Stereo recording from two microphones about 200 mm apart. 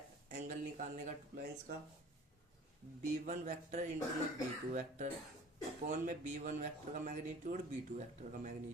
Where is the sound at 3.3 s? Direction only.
40° right (ahead or behind).